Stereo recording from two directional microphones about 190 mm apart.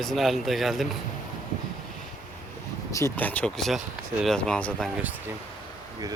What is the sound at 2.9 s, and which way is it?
Speech, 15° left (ahead or behind).